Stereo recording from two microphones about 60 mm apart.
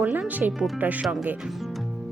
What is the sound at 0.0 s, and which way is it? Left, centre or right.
Speech, right.